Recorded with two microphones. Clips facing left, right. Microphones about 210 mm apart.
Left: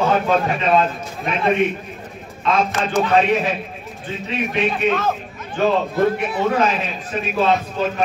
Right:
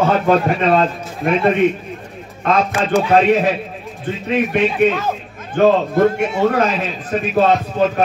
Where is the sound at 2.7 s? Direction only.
10° right (ahead or behind).